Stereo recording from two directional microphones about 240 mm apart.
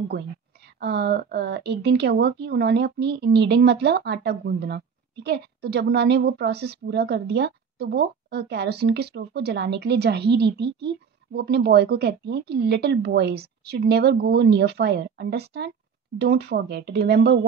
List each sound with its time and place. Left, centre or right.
0.7 s speech: right